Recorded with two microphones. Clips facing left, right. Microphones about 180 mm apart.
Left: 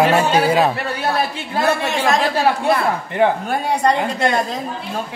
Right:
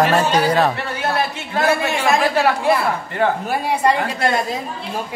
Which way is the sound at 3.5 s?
5° right (ahead or behind).